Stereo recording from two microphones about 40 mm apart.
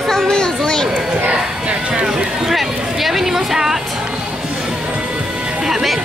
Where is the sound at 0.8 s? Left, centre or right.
Right.